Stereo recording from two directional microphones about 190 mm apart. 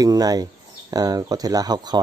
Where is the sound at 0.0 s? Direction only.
20° right (ahead or behind).